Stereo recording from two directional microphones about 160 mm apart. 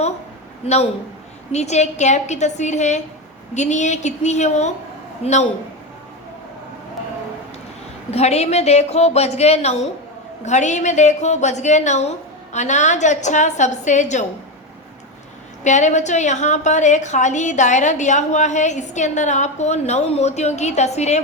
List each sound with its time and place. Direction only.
0.6 s a woman's voice: 40° left (ahead or behind)
8.1 s a woman's voice: 40° left (ahead or behind)
15.6 s a woman's voice: 50° left (ahead or behind)